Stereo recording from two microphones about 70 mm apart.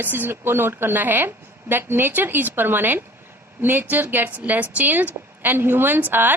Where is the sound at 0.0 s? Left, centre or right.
Right.